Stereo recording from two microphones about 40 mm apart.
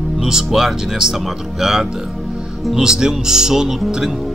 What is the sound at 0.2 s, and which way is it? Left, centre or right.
Speech, centre.